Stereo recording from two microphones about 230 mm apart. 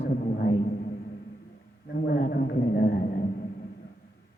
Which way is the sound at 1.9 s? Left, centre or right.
Left.